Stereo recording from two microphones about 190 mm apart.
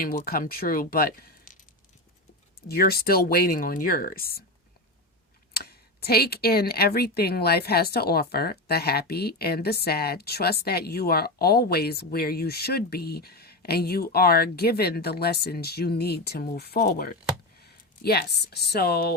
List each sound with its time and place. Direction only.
0.0 s speech: 50° left (ahead or behind)
2.6 s speech: 55° left (ahead or behind)
5.5 s speech: 55° left (ahead or behind)